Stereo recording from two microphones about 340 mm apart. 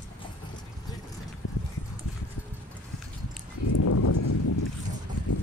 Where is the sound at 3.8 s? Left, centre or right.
Left.